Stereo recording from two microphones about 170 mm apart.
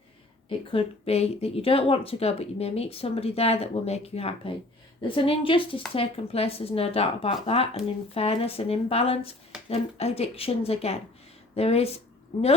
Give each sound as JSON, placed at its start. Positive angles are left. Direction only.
{"t": 0.7, "sound": "speech", "side_deg": 35}